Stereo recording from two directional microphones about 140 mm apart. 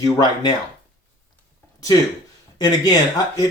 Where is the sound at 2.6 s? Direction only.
30° left (ahead or behind).